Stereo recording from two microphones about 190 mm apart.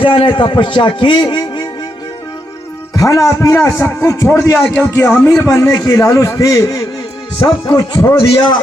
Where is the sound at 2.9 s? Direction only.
15° left (ahead or behind).